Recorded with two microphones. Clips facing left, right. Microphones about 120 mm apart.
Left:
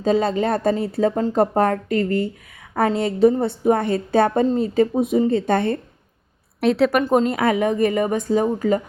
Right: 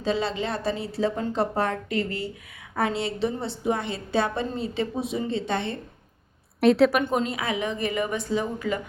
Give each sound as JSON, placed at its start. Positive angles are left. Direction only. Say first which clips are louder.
{"t": 0.0, "sound": "a woman's voice", "louder": "left 7 dB", "side_deg": 45}
{"t": 6.6, "sound": "a woman's voice", "louder": "even", "side_deg": 0}
{"t": 7.0, "sound": "a woman's voice", "louder": "left 8 dB", "side_deg": 45}